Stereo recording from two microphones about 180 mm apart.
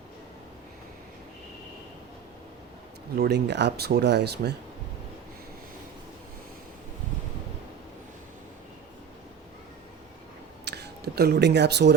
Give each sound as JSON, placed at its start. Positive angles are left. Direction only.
{"t": 3.2, "sound": "speech", "side_deg": -70}
{"t": 10.7, "sound": "speech", "side_deg": -65}